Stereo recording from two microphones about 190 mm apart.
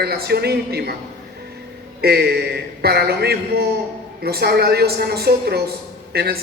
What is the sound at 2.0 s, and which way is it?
Speech, 55° right (ahead or behind).